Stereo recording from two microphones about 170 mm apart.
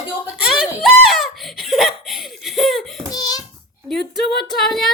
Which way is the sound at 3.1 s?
20° left (ahead or behind).